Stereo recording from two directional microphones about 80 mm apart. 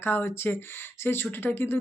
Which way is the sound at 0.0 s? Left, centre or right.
Left.